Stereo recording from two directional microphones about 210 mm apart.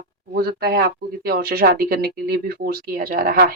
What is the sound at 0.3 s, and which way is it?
Speech, 45° right (ahead or behind).